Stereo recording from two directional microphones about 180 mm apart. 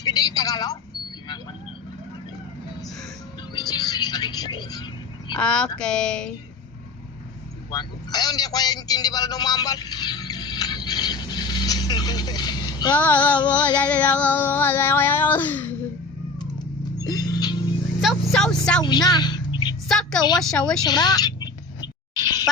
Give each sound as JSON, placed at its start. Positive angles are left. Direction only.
{"t": 0.0, "sound": "a woman's voice", "side_deg": 20}
{"t": 3.5, "sound": "speech", "side_deg": 20}
{"t": 5.4, "sound": "speech", "side_deg": 5}
{"t": 7.7, "sound": "a man's voice", "side_deg": 20}
{"t": 12.9, "sound": "child singing", "side_deg": 10}
{"t": 17.0, "sound": "music", "side_deg": 20}
{"t": 18.0, "sound": "a sound", "side_deg": 0}
{"t": 18.8, "sound": "a sound", "side_deg": 20}
{"t": 19.9, "sound": "speech", "side_deg": 5}
{"t": 20.8, "sound": "a woman's voice", "side_deg": 20}
{"t": 21.8, "sound": "a sound", "side_deg": 20}